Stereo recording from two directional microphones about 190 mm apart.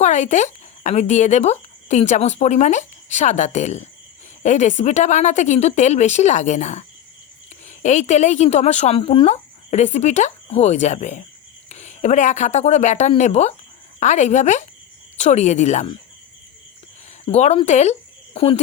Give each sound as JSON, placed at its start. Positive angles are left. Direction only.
{"t": 0.0, "sound": "speech", "side_deg": 35}
{"t": 17.2, "sound": "speech", "side_deg": 35}